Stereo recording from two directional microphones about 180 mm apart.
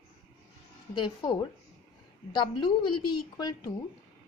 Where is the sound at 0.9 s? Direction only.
25° left (ahead or behind).